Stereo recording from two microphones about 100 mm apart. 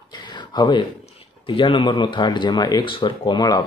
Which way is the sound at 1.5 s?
55° left (ahead or behind).